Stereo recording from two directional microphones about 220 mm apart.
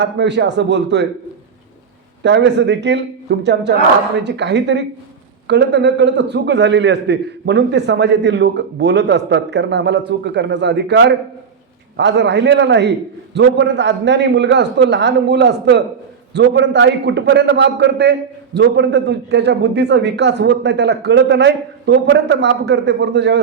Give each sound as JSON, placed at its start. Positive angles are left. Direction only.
{"t": 0.0, "sound": "a man's voice", "side_deg": -50}
{"t": 2.2, "sound": "a man's voice", "side_deg": -50}